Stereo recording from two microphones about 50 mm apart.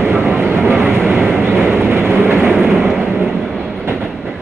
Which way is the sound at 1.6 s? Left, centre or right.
Right.